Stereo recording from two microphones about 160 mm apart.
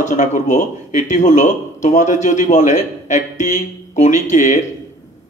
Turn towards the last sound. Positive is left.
turn(degrees=50)  # may be behind; listen again after turning